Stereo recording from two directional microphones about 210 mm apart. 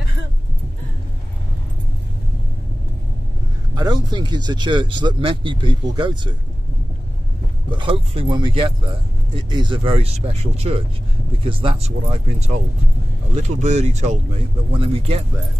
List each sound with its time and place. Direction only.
3.7 s speech: 20° right (ahead or behind)
7.7 s speech: 25° right (ahead or behind)